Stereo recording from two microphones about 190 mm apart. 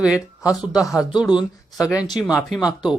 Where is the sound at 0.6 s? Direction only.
20° left (ahead or behind).